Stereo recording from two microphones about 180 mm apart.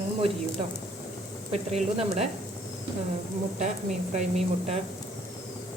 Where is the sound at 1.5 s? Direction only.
35° right (ahead or behind).